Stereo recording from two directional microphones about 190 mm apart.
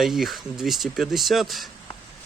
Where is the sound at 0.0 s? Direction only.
Centre (ahead or behind).